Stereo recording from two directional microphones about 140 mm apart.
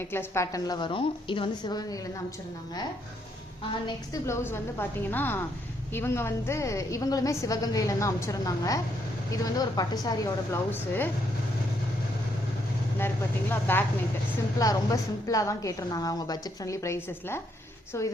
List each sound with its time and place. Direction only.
0.0 s a woman's voice: 15° left (ahead or behind)
3.8 s a woman's voice: 20° left (ahead or behind)
13.5 s a woman's voice: 15° left (ahead or behind)